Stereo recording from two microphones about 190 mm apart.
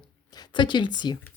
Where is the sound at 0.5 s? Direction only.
25° left (ahead or behind).